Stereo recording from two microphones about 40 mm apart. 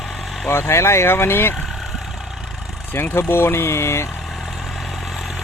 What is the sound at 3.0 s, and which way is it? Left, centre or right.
Speech, left.